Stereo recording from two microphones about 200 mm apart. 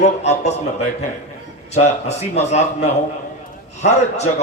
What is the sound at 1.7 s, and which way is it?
A man's voice, 35° left (ahead or behind).